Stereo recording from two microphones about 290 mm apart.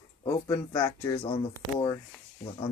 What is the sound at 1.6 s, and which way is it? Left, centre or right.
Speech, centre.